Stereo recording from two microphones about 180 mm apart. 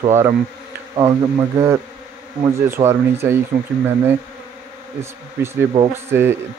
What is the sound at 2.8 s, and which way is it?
Speech, 25° right (ahead or behind).